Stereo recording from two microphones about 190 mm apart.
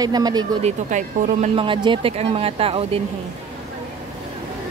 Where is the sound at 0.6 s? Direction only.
40° right (ahead or behind).